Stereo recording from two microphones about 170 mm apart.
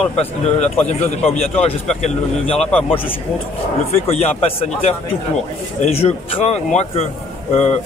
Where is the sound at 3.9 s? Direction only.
35° left (ahead or behind).